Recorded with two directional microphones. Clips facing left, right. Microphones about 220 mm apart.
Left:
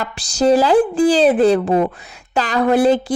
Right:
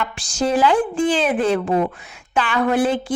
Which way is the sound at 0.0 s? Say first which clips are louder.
Left 5 dB; 35° left (ahead or behind).